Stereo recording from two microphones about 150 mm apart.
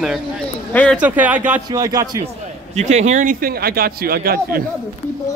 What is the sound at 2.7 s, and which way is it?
Speech, 50° right (ahead or behind).